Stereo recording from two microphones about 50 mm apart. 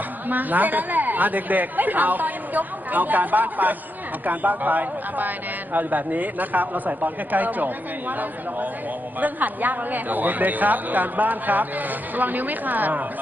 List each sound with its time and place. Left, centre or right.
0.3 s speech: right